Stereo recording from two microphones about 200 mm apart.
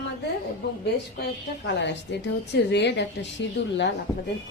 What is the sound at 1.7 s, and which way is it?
A woman's voice, 60° left (ahead or behind).